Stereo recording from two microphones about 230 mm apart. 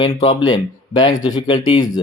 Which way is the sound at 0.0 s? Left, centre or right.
Left.